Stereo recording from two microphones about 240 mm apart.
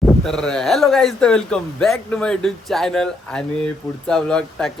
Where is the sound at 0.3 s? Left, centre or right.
Centre.